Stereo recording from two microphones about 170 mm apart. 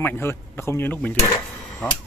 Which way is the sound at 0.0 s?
15° left (ahead or behind).